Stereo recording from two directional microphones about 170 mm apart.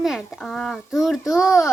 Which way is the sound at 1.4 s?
15° left (ahead or behind).